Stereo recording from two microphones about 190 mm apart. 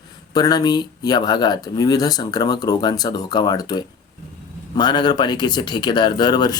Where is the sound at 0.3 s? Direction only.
20° left (ahead or behind).